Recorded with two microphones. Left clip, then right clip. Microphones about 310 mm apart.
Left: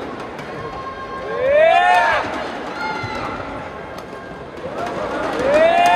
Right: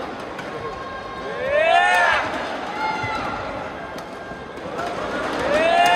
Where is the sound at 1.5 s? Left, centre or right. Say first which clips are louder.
Left 3 dB; left.